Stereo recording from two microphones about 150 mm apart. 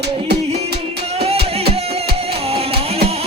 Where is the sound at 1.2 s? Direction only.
40° right (ahead or behind).